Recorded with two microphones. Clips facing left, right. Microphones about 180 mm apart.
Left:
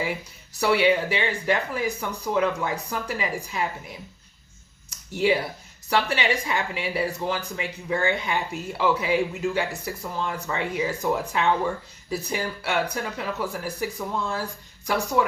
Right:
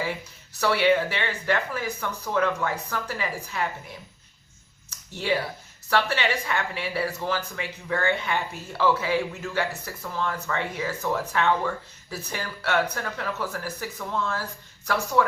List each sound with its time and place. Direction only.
0.6 s speech: 15° left (ahead or behind)
4.9 s a sound: 15° left (ahead or behind)
5.9 s speech: 15° left (ahead or behind)